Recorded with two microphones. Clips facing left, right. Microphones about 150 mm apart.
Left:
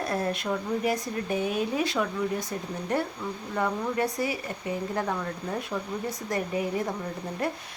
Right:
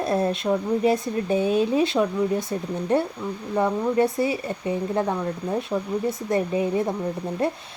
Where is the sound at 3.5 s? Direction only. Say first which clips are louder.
Right 7 dB; 25° right (ahead or behind).